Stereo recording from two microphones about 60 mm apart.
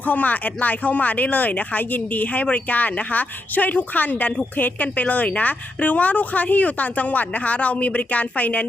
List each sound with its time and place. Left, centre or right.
0.0 s speech: left